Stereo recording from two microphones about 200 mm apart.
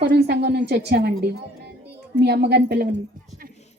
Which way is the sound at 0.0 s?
60° right (ahead or behind).